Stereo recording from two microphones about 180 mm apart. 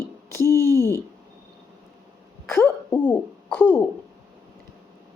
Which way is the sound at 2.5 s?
10° left (ahead or behind).